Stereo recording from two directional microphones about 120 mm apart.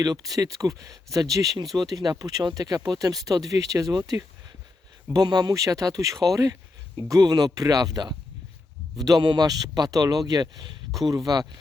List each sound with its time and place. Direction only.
0.0 s speech: 30° right (ahead or behind)